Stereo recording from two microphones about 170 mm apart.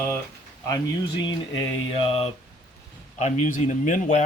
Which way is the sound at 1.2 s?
30° left (ahead or behind).